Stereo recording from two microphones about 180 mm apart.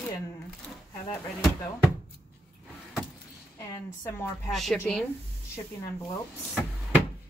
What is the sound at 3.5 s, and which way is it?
Speech, 15° left (ahead or behind).